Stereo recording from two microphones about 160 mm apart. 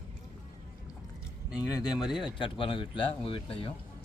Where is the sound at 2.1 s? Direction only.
30° left (ahead or behind).